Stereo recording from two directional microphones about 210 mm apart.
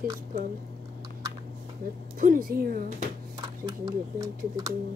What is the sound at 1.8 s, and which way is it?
Speech, 40° right (ahead or behind).